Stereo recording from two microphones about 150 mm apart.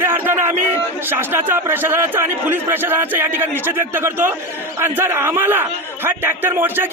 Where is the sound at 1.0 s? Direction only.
15° right (ahead or behind).